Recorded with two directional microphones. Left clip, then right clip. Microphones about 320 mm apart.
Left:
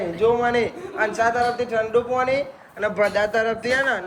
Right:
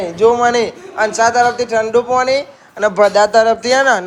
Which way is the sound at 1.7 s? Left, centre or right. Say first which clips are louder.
Right 8 dB; centre.